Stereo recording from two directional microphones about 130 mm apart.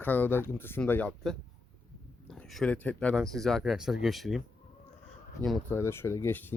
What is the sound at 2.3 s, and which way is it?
Speech, centre (ahead or behind).